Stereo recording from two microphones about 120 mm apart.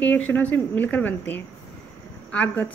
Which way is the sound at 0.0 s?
15° left (ahead or behind).